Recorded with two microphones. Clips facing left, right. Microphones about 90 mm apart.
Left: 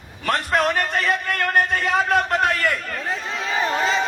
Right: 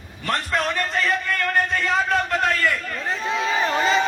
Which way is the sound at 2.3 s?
20° left (ahead or behind).